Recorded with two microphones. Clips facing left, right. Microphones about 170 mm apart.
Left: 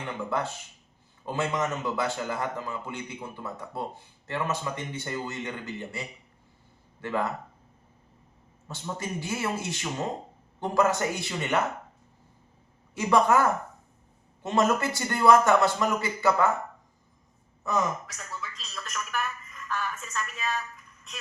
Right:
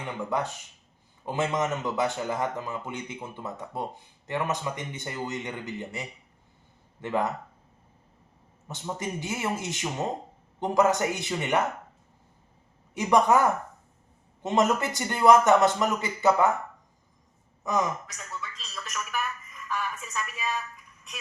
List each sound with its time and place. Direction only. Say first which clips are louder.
0.0 s a man's voice: right 1 dB; 15° right (ahead or behind)
8.6 s a man's voice: right 1 dB; 20° right (ahead or behind)
12.9 s a man's voice: right 1 dB; 20° right (ahead or behind)
17.7 s a man's voice: right 1 dB; 15° right (ahead or behind)
18.0 s a sound: even; centre (ahead or behind)